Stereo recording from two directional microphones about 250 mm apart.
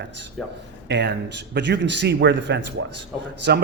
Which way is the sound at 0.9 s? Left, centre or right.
Right.